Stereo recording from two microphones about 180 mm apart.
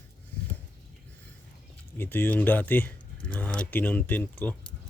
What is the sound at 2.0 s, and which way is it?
Speech, 10° left (ahead or behind).